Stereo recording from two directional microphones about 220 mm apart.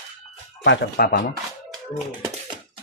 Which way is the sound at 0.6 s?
45° left (ahead or behind).